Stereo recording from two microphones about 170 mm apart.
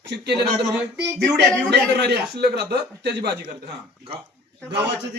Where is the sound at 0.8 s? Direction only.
10° right (ahead or behind).